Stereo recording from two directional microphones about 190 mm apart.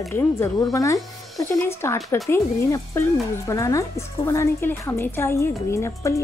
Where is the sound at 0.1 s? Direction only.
15° left (ahead or behind).